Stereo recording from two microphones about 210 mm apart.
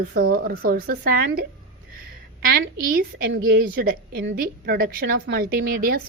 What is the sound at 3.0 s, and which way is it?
A woman's voice, 45° right (ahead or behind).